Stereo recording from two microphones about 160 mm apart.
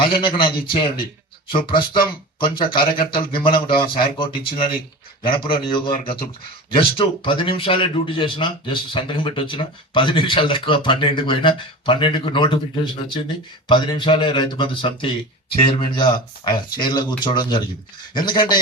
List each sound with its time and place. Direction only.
0.0 s speech: 30° left (ahead or behind)